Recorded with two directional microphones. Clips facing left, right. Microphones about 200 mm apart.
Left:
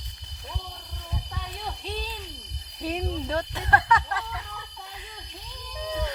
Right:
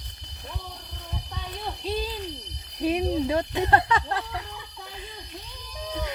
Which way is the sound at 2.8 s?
10° right (ahead or behind).